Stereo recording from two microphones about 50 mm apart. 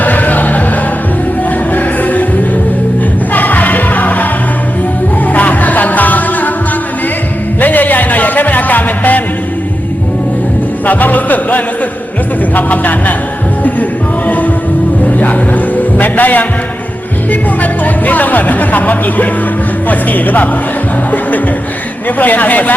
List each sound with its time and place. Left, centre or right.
0.0 s music: left
1.7 s music: left
3.3 s music: left
5.3 s music: left
7.6 s music: left
10.8 s music: left
12.5 s a sound: left
14.3 s music: left
17.6 s music: left
22.2 s speech: left